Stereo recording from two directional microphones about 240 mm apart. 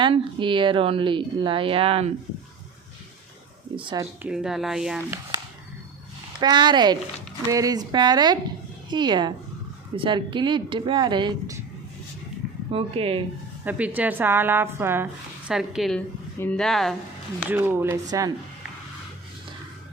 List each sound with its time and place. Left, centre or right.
0.0 s a woman's voice: right
3.8 s a woman's voice: centre
4.2 s speech: centre
6.4 s a woman's voice: centre
12.7 s a woman's voice: right
13.7 s a woman's voice: centre